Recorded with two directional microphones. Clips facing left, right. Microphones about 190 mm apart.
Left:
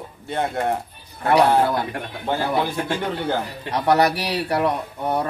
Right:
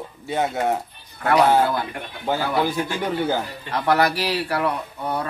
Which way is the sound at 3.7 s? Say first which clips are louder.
Left 2 dB; 15° left (ahead or behind).